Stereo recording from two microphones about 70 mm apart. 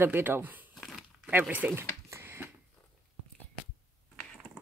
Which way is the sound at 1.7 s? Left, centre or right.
Right.